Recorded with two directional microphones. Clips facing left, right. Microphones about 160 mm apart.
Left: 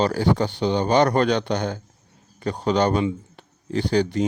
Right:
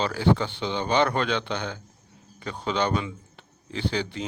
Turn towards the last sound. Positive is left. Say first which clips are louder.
# left 8 dB
turn(degrees=45)  # may be behind; listen again after turning